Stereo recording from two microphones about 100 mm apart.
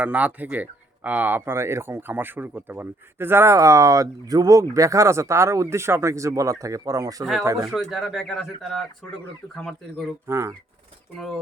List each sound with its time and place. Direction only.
0.0 s speech: 15° right (ahead or behind); by 7.3 s 35° right (ahead or behind)
7.6 s speech: centre (ahead or behind)
10.2 s speech: 30° right (ahead or behind)